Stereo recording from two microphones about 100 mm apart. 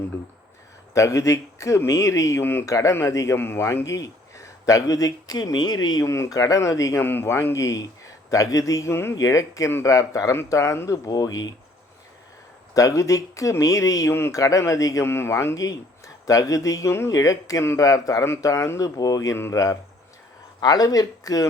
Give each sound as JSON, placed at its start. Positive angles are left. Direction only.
{"t": 0.9, "sound": "a man's voice", "side_deg": 35}
{"t": 2.6, "sound": "a man's voice", "side_deg": 35}
{"t": 6.1, "sound": "a man's voice", "side_deg": 30}
{"t": 12.7, "sound": "a man's voice", "side_deg": 35}